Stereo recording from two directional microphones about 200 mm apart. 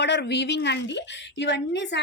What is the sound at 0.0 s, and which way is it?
A woman's voice, 60° left (ahead or behind).